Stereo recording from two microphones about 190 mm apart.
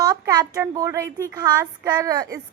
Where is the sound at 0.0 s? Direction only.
20° right (ahead or behind).